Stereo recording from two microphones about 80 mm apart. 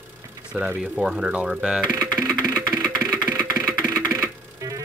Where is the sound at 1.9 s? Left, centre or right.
Right.